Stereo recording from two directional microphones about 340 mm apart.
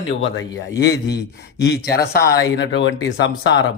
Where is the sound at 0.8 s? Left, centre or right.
Left.